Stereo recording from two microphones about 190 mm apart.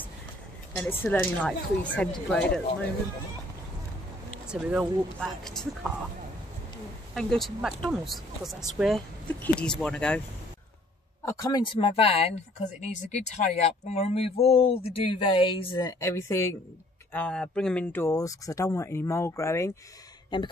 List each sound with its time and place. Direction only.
0.7 s speech: 10° left (ahead or behind)
4.5 s speech: 5° right (ahead or behind)
7.2 s speech: centre (ahead or behind)
11.2 s speech: 20° left (ahead or behind)
20.3 s speech: 25° left (ahead or behind)